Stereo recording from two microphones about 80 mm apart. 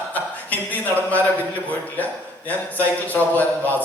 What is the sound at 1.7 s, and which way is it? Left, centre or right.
A man's voice, left.